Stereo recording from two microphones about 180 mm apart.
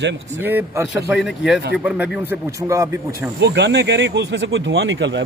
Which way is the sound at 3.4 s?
70° right (ahead or behind).